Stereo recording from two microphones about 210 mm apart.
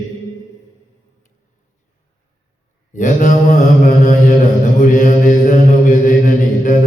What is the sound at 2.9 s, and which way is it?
Mantra, 35° left (ahead or behind).